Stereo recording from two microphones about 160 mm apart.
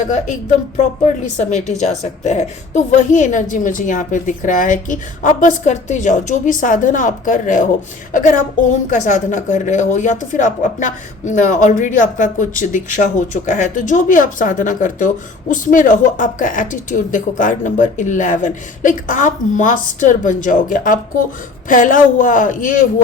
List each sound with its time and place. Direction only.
0.0 s a woman's voice: 50° left (ahead or behind)